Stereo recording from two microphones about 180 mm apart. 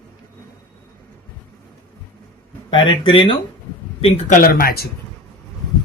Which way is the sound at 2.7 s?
30° left (ahead or behind).